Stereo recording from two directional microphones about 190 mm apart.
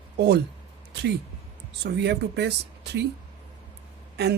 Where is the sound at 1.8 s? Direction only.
60° right (ahead or behind).